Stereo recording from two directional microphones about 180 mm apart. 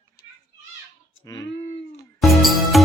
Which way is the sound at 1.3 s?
20° left (ahead or behind).